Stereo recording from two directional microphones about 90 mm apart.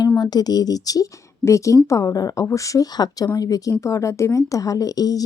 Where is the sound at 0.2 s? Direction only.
50° left (ahead or behind).